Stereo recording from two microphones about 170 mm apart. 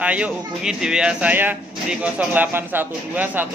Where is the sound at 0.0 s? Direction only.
10° right (ahead or behind).